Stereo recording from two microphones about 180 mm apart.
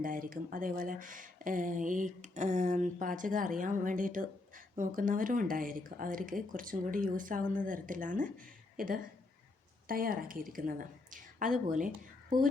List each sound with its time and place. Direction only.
0.0 s speech: 50° right (ahead or behind)
8.7 s a sound: 50° right (ahead or behind)
9.9 s speech: 55° right (ahead or behind)